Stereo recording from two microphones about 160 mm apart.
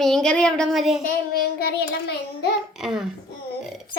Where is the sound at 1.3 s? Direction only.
75° left (ahead or behind).